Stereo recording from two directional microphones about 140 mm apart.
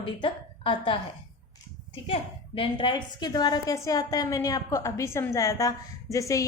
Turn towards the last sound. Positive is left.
turn(degrees=25)  # may be behind; listen again after turning